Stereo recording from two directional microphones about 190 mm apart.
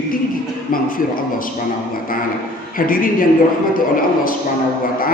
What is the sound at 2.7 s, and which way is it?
A man's voice, 50° left (ahead or behind).